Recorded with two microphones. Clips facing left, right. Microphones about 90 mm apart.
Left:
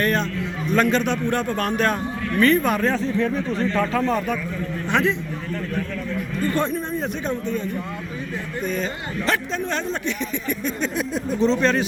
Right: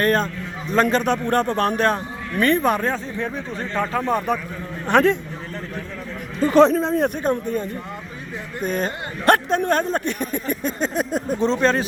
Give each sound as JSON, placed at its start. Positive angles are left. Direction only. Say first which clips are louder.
{"t": 0.0, "sound": "speech", "louder": "right 2 dB", "side_deg": -40}
{"t": 1.5, "sound": "speech", "louder": "right 2 dB", "side_deg": -30}
{"t": 2.8, "sound": "speech", "louder": "left 4 dB", "side_deg": -15}
{"t": 4.9, "sound": "speech", "louder": "right 5 dB", "side_deg": -50}
{"t": 6.5, "sound": "speech", "louder": "right 12 dB", "side_deg": -90}
{"t": 7.3, "sound": "speech", "louder": "right 3 dB", "side_deg": -45}